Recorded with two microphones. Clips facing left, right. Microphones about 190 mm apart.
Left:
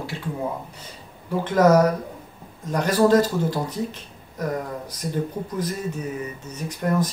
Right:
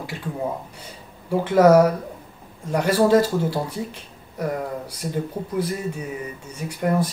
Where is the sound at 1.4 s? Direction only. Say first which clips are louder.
Right 2 dB; 10° right (ahead or behind).